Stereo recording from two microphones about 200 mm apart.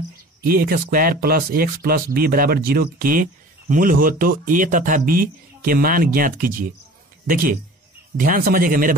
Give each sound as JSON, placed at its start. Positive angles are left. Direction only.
{"t": 0.5, "sound": "speech", "side_deg": -50}
{"t": 8.2, "sound": "speech", "side_deg": -45}